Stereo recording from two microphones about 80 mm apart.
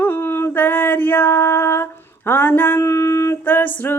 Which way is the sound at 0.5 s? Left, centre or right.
Left.